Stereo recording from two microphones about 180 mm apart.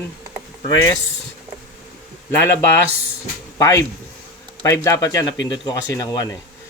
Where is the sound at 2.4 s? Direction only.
15° left (ahead or behind).